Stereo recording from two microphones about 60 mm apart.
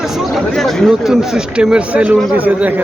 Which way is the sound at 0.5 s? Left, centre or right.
Centre.